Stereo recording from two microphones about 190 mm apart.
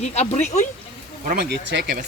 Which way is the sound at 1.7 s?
65° right (ahead or behind).